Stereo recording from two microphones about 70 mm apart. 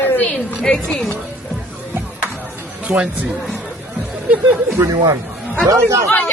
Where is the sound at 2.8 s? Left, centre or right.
Centre.